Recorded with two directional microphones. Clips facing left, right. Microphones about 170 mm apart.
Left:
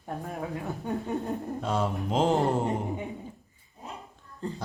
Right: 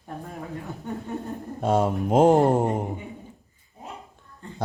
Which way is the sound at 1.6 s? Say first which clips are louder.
Right 8 dB; 50° right (ahead or behind).